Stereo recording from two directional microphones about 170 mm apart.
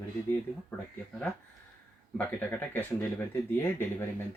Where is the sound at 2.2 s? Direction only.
10° left (ahead or behind).